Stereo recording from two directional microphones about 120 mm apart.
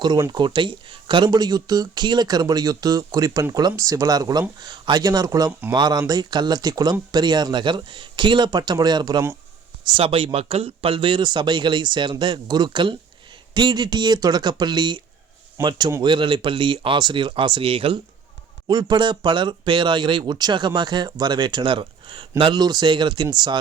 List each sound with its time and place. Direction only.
0.3 s speech: 40° right (ahead or behind)
5.5 s speech: 15° right (ahead or behind)
5.7 s speech: 35° right (ahead or behind)
15.6 s speech: 20° right (ahead or behind)
16.0 s speech: 40° right (ahead or behind)
18.7 s speech: 35° right (ahead or behind)